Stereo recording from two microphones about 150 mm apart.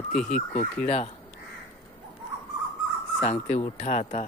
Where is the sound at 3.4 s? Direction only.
50° left (ahead or behind).